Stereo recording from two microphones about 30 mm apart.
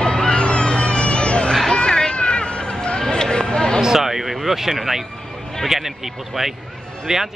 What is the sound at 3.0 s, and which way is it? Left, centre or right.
Speech, left.